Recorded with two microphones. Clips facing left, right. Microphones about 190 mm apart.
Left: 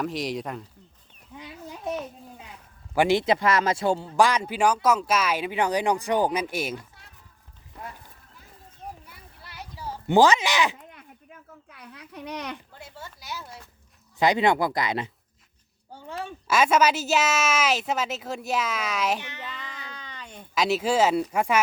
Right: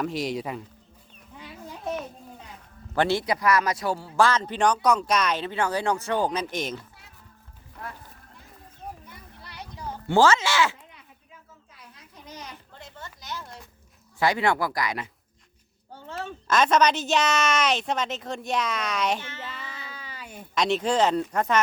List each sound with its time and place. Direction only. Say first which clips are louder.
0.0 s speech: right 1 dB; centre (ahead or behind)
2.9 s a man's voice: left 3 dB; 15° left (ahead or behind)
4.2 s speech: even; 15° left (ahead or behind)
9.0 s a sound: right 3 dB; 5° left (ahead or behind)
10.1 s speech: left 1 dB; 15° left (ahead or behind)
10.8 s a sound: left 5 dB; 55° left (ahead or behind)
12.8 s speech: left 1 dB; 10° left (ahead or behind)
14.2 s a man's voice: left 2 dB; 20° left (ahead or behind)
16.0 s speech: even; 15° left (ahead or behind)
19.2 s speech: right 1 dB; 15° left (ahead or behind)
19.5 s a sound: even; 5° right (ahead or behind)
20.6 s speech: left 1 dB; 5° left (ahead or behind)